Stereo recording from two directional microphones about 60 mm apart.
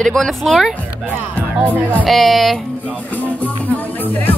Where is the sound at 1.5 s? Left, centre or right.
Right.